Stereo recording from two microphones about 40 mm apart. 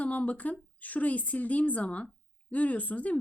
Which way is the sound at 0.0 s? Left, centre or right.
Left.